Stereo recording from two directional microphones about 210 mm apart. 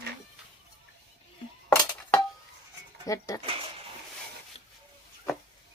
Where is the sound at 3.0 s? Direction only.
15° left (ahead or behind).